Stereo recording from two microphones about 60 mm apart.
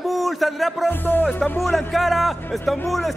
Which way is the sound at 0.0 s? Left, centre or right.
Centre.